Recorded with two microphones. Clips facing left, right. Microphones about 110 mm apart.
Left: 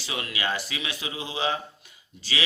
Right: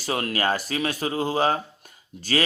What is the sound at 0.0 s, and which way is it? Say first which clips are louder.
A man's voice: right 6 dB; 45° right (ahead or behind).